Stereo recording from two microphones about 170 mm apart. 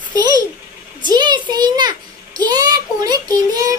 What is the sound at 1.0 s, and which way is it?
A child's voice, 25° right (ahead or behind).